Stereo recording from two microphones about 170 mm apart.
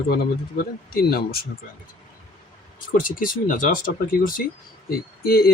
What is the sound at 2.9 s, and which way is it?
Speech, 50° left (ahead or behind).